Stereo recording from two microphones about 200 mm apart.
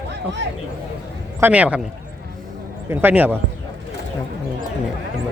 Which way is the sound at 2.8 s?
10° right (ahead or behind).